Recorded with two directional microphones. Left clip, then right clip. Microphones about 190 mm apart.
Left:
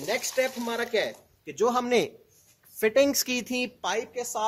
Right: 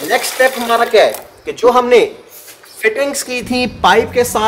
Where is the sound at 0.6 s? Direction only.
35° left (ahead or behind).